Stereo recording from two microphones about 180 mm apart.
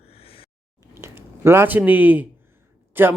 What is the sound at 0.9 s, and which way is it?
Speech, 15° right (ahead or behind).